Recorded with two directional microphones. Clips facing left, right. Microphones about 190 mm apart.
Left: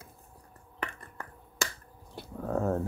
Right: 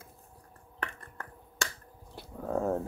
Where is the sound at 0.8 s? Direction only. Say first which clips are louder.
Left 2 dB; 5° left (ahead or behind).